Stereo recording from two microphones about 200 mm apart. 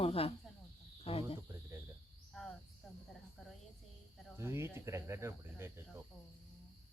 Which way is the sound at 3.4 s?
Centre (ahead or behind).